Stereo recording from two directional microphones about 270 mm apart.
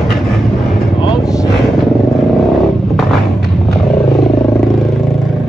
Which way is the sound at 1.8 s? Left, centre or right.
Centre.